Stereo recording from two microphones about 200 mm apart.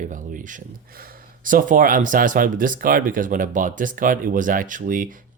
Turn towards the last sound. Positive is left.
turn(degrees=-40)  # may be behind; listen again after turning